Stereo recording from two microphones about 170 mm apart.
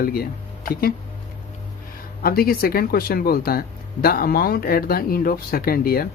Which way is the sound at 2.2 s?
60° left (ahead or behind).